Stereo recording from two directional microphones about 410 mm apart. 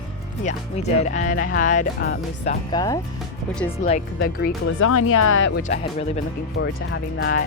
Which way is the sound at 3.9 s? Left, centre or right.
Centre.